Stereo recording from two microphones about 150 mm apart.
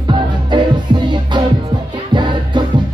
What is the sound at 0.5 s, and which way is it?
Music, 30° right (ahead or behind).